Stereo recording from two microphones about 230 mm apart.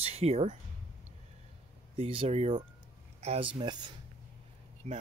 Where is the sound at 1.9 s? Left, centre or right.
Right.